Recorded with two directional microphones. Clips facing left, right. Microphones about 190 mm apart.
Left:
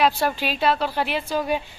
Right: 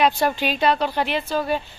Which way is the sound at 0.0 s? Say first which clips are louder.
Right 1 dB; 5° left (ahead or behind).